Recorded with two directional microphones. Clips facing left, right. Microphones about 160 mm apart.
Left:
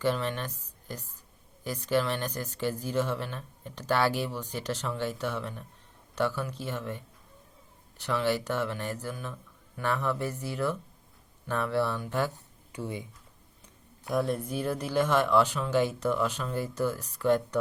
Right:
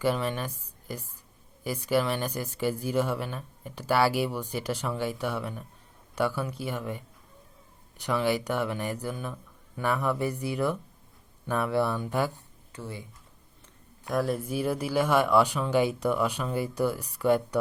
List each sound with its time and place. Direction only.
0.0 s a woman's voice: 10° right (ahead or behind)
12.7 s speech: 15° left (ahead or behind)
14.1 s speech: centre (ahead or behind)